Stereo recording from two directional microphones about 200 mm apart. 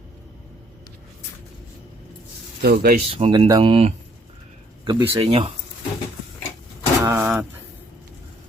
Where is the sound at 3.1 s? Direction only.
30° right (ahead or behind).